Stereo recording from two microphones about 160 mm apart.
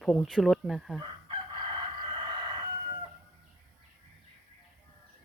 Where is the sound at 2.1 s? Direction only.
30° right (ahead or behind).